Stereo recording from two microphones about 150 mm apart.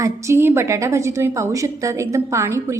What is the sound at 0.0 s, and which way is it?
A woman's voice, 15° right (ahead or behind).